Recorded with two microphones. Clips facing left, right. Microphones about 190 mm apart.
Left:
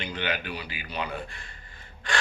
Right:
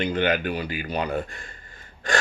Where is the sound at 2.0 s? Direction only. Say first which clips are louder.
Right 6 dB; 45° right (ahead or behind).